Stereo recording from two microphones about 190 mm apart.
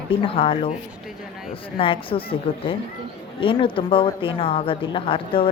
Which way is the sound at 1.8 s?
30° left (ahead or behind).